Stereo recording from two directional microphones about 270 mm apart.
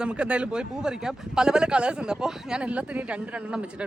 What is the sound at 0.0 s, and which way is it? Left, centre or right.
A man's voice, centre.